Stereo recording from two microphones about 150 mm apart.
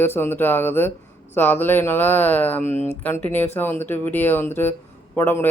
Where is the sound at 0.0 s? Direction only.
15° left (ahead or behind).